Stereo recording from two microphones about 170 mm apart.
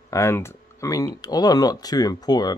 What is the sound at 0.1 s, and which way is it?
Speech, 15° left (ahead or behind).